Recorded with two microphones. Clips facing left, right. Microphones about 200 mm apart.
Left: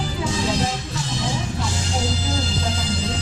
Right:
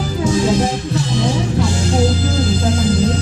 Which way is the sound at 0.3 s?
50° right (ahead or behind).